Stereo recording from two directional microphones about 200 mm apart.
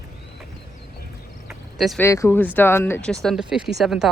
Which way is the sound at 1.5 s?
Centre (ahead or behind).